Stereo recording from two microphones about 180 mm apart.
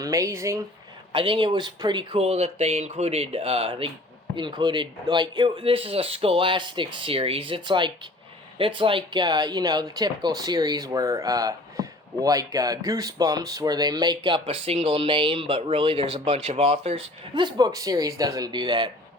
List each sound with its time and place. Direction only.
0.0 s speech: 20° right (ahead or behind)
1.1 s speech: 30° right (ahead or behind)